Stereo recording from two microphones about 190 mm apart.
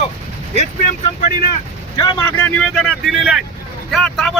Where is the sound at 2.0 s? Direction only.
20° left (ahead or behind).